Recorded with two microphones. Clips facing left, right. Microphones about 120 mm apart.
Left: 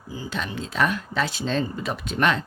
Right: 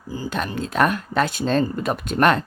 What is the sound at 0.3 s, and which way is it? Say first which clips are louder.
Speech: right 5 dB; 50° right (ahead or behind).